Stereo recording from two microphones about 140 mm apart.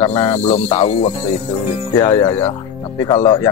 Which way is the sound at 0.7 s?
40° left (ahead or behind).